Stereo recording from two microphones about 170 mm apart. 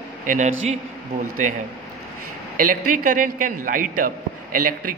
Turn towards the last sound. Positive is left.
turn(degrees=-55)  # may be behind; listen again after turning